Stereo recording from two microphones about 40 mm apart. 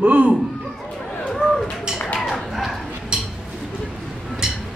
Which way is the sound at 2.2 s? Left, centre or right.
Centre.